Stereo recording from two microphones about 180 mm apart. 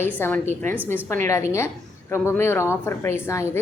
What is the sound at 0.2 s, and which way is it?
A woman's voice, 10° left (ahead or behind).